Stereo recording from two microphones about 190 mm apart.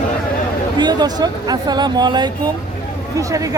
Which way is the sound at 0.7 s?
20° right (ahead or behind).